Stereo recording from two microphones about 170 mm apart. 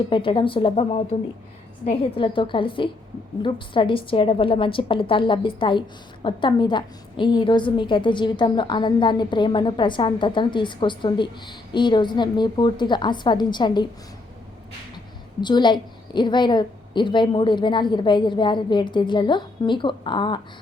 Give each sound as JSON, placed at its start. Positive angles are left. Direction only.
{"t": 0.1, "sound": "a woman's voice", "side_deg": 30}
{"t": 15.4, "sound": "a woman's voice", "side_deg": 25}